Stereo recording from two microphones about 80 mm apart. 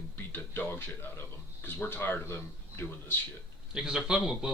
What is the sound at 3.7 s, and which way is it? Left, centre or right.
Speech, centre.